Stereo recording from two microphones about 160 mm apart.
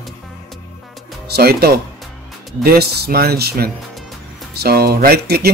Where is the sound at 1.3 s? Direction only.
75° right (ahead or behind).